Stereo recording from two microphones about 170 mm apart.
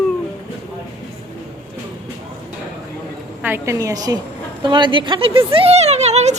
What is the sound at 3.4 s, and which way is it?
A woman's voice, 15° right (ahead or behind).